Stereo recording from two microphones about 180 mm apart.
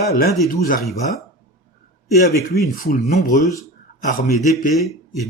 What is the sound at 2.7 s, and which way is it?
Speech, 55° left (ahead or behind).